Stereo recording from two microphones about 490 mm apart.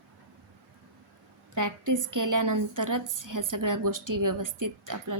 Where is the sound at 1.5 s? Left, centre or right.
Right.